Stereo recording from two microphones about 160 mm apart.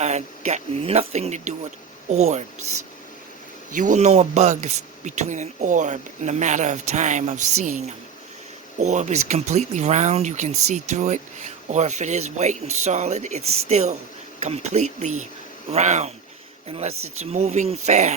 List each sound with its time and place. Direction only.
0.0 s speech: 45° right (ahead or behind)
3.7 s speech: 55° right (ahead or behind)